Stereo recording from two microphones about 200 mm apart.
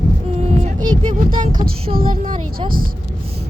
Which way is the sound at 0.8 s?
25° right (ahead or behind).